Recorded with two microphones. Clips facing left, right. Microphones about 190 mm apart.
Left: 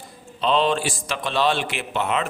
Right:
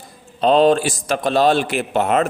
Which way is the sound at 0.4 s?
45° right (ahead or behind).